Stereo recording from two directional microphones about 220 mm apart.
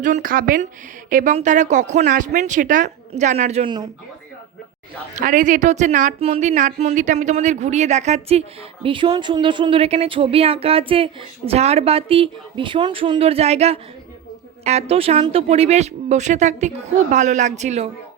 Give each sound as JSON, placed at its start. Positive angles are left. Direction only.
{"t": 0.0, "sound": "a woman's voice", "side_deg": -35}
{"t": 5.1, "sound": "a woman's voice", "side_deg": -35}